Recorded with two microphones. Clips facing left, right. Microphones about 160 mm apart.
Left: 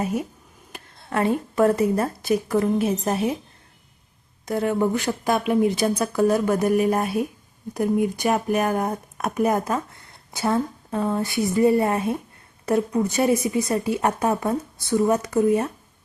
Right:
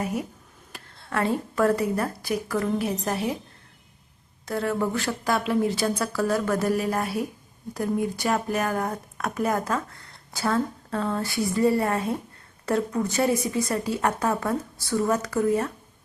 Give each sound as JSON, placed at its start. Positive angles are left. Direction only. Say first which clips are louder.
{"t": 0.0, "sound": "a woman's voice", "louder": "left 3 dB", "side_deg": 20}
{"t": 4.4, "sound": "speech", "louder": "left 4 dB", "side_deg": 20}